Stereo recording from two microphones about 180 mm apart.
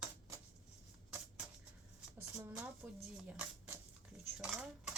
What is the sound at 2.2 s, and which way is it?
Speech, 10° right (ahead or behind).